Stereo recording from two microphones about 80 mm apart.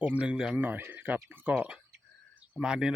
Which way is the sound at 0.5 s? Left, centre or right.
Right.